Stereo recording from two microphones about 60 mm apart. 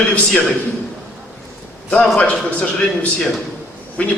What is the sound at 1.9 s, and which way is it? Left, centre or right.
A man's voice, left.